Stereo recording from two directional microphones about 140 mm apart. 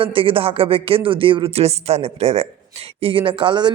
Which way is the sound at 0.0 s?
40° right (ahead or behind).